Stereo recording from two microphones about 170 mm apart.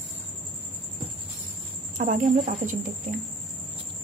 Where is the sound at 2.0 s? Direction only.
50° right (ahead or behind).